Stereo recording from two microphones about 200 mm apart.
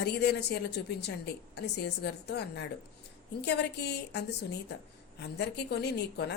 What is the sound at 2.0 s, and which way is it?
Speech, 55° left (ahead or behind).